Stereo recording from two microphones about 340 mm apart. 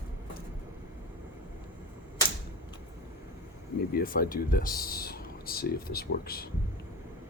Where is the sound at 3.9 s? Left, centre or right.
Left.